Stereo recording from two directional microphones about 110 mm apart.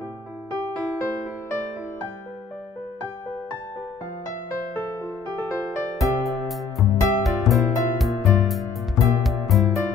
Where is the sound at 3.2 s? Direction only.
20° left (ahead or behind).